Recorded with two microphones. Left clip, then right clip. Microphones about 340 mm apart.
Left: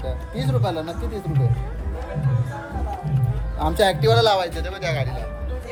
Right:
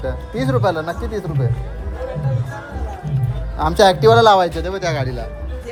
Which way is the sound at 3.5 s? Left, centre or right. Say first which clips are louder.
Right 6 dB; right.